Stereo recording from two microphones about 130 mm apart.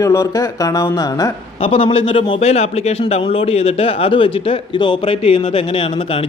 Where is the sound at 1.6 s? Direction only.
40° left (ahead or behind).